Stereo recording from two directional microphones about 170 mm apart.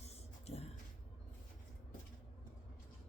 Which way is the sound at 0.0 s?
40° left (ahead or behind).